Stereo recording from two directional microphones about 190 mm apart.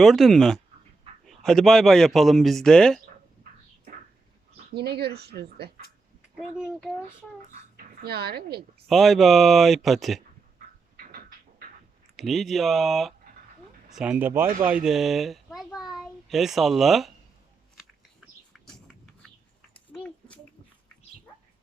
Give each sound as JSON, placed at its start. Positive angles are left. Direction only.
{"t": 0.0, "sound": "speech", "side_deg": 0}
{"t": 4.7, "sound": "speech", "side_deg": -60}
{"t": 6.6, "sound": "speech", "side_deg": 0}
{"t": 8.0, "sound": "speech", "side_deg": -55}
{"t": 8.9, "sound": "speech", "side_deg": 0}
{"t": 10.9, "sound": "cupboard open or close", "side_deg": -45}
{"t": 12.1, "sound": "a child's voice", "side_deg": 0}
{"t": 18.5, "sound": "a sound", "side_deg": 5}